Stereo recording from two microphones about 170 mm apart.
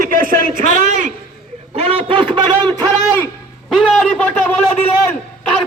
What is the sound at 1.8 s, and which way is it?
Speech, 35° right (ahead or behind).